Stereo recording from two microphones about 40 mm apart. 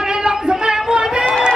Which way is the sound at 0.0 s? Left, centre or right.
Centre.